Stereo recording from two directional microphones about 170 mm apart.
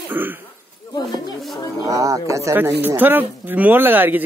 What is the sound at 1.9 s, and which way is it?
Speech, 20° right (ahead or behind).